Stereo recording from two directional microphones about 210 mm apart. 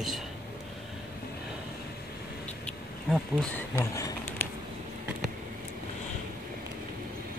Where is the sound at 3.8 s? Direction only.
15° left (ahead or behind).